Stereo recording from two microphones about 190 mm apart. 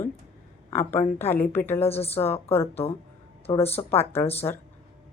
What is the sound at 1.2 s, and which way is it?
Speech, 10° left (ahead or behind).